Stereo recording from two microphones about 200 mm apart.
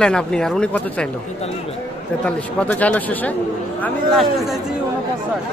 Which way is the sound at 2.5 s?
5° left (ahead or behind).